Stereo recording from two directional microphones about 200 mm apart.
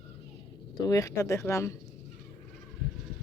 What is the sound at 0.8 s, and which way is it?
Speech, 15° left (ahead or behind).